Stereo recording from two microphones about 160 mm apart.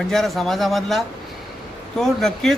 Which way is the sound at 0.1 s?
Centre (ahead or behind).